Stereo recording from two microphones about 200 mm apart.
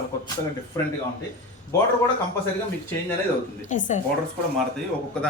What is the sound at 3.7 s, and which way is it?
Speech, 40° left (ahead or behind).